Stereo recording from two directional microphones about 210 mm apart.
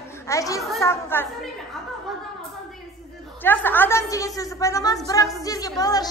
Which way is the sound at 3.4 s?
10° left (ahead or behind).